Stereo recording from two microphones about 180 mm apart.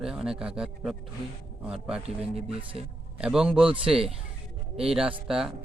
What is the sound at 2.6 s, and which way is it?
Speech, 30° right (ahead or behind).